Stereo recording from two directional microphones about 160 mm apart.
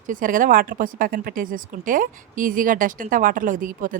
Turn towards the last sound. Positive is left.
turn(degrees=-60)  # may be behind; listen again after turning